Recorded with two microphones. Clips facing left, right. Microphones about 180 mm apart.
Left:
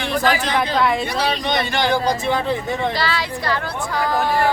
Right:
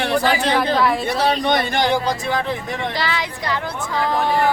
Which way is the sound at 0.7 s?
Centre (ahead or behind).